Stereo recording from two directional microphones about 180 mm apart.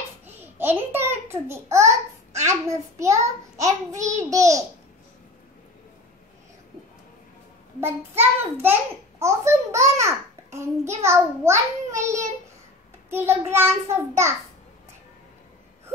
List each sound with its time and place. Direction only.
0.3 s a sound: 10° right (ahead or behind)
2.4 s a child's voice: 15° right (ahead or behind)
7.8 s a child's voice: 10° right (ahead or behind)